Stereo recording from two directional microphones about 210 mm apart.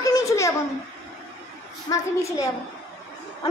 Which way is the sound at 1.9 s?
15° left (ahead or behind).